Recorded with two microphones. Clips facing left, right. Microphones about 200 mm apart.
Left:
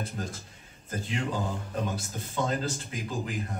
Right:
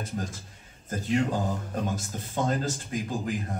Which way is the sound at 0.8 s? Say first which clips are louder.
Right 6 dB; 45° right (ahead or behind).